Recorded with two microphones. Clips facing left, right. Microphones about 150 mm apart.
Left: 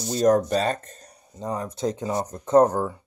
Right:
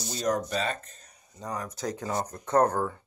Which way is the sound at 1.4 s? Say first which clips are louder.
Left 6 dB; 25° left (ahead or behind).